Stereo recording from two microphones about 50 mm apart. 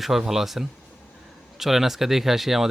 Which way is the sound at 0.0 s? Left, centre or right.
Centre.